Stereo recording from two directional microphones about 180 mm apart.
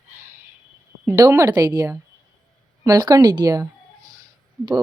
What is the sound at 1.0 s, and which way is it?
Speech, 15° right (ahead or behind).